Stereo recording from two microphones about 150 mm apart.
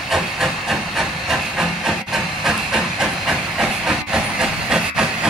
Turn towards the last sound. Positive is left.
turn(degrees=-5)  # may be behind; listen again after turning